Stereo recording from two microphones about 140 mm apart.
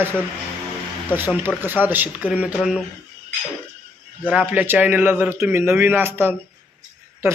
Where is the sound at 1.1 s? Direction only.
15° right (ahead or behind).